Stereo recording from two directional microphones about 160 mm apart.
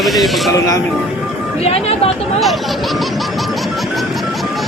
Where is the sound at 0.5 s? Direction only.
20° left (ahead or behind).